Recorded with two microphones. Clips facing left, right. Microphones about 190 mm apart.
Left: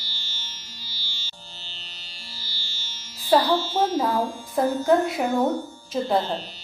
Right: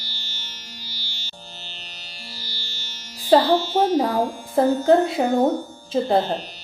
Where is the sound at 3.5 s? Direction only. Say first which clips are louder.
Right 4 dB; 15° right (ahead or behind).